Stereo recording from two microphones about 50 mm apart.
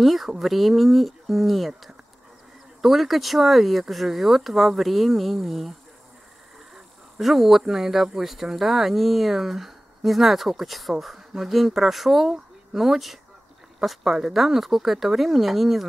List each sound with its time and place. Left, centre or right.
0.0 s speech: centre
2.8 s speech: centre
6.7 s speech: centre